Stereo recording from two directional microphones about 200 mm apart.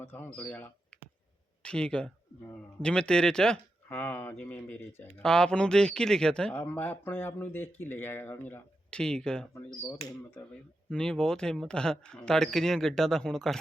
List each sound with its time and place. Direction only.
0.0 s speech: 10° left (ahead or behind)
10.8 s speech: 5° left (ahead or behind)